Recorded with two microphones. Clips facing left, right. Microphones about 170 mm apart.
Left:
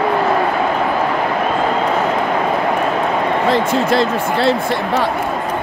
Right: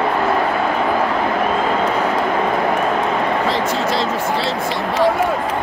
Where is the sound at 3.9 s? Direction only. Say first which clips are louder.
Left 4 dB; 55° left (ahead or behind).